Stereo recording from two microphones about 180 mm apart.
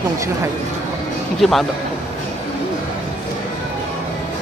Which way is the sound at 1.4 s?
Centre (ahead or behind).